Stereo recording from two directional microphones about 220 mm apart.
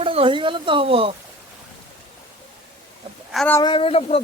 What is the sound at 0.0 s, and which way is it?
A man's voice, 25° right (ahead or behind).